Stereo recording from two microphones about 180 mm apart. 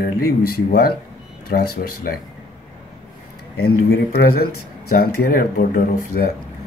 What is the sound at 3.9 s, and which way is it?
Speech, 60° left (ahead or behind).